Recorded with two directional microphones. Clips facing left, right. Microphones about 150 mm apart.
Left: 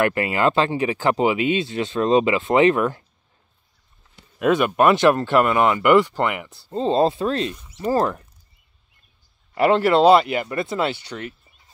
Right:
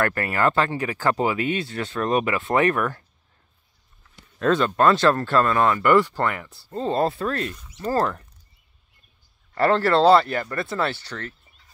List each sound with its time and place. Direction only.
0.0 s speech: 20° left (ahead or behind)
4.4 s speech: 15° left (ahead or behind)
9.6 s speech: 15° left (ahead or behind)